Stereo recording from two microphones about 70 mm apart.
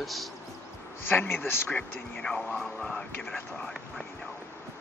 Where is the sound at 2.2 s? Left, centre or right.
Centre.